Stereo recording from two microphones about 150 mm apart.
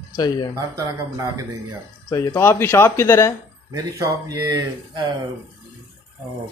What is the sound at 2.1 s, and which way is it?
Speech, 15° left (ahead or behind).